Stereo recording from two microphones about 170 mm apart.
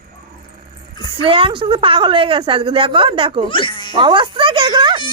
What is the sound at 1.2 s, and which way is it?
A woman's voice, 30° right (ahead or behind).